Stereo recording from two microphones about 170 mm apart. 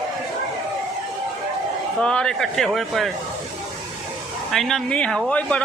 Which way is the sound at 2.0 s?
5° left (ahead or behind).